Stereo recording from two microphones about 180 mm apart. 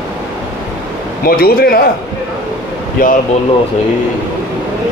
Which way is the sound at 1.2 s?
55° left (ahead or behind).